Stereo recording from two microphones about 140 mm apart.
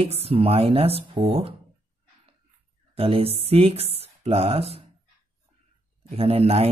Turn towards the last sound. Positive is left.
turn(degrees=-45)  # may be behind; listen again after turning